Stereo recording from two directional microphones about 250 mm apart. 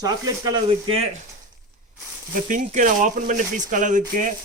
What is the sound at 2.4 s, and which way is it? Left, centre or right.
Speech, right.